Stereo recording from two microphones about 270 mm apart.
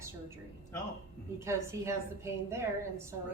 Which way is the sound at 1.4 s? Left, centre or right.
Centre.